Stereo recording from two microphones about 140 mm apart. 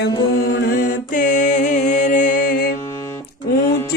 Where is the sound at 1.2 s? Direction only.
65° left (ahead or behind); by 2.7 s 85° left.